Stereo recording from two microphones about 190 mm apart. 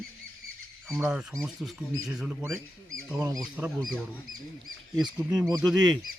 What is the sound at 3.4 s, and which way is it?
Speech, 5° right (ahead or behind).